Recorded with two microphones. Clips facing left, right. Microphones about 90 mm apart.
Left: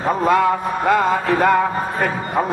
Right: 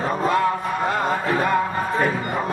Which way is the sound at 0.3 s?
90° left.